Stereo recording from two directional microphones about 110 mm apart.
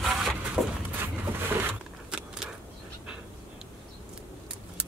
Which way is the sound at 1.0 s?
15° right (ahead or behind).